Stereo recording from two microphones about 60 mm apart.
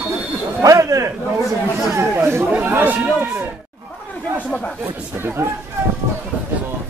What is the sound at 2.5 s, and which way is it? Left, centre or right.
Speech, right.